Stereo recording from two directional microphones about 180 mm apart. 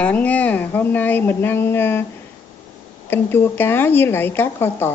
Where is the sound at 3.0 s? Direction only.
10° left (ahead or behind).